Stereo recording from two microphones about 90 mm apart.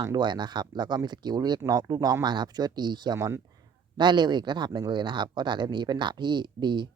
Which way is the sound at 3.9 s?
55° right (ahead or behind).